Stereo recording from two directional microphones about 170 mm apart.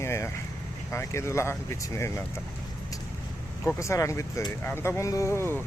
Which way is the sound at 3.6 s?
15° left (ahead or behind).